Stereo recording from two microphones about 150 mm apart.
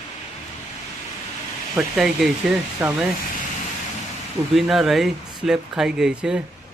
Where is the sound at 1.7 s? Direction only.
5° right (ahead or behind).